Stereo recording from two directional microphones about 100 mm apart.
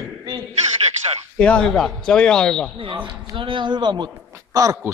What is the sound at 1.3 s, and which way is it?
Speech, 10° left (ahead or behind).